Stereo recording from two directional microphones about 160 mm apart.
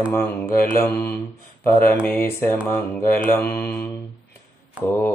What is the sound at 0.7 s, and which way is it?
Mantra, 20° left (ahead or behind).